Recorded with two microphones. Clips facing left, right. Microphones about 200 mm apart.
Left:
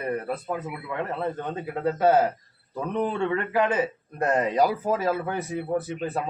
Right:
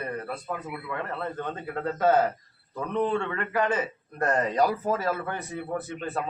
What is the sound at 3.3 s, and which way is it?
A man's voice, 20° left (ahead or behind).